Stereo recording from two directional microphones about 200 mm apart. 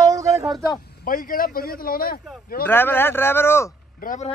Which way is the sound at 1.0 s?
45° left (ahead or behind).